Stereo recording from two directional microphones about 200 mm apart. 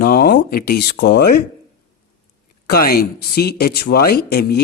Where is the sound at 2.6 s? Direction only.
50° left (ahead or behind).